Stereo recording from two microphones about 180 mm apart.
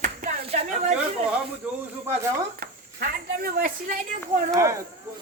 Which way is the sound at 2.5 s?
55° right (ahead or behind).